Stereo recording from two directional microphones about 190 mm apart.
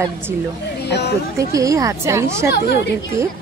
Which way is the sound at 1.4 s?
15° right (ahead or behind).